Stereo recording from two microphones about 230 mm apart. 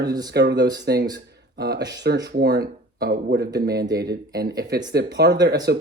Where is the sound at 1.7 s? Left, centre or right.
Centre.